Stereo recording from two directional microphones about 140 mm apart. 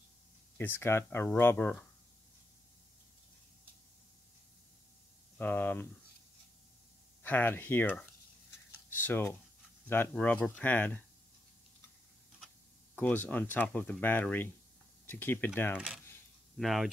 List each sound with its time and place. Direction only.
0.6 s speech: 15° left (ahead or behind)
5.4 s speech: 15° left (ahead or behind)
7.2 s speech: 15° left (ahead or behind)
12.9 s speech: 10° left (ahead or behind)
16.5 s speech: centre (ahead or behind)